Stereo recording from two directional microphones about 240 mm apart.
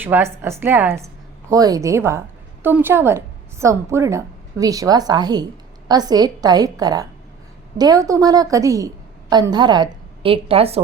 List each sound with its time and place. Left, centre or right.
0.0 s a woman's voice: centre; by 10.8 s right